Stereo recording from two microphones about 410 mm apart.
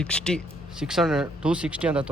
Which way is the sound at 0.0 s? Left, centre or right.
Centre.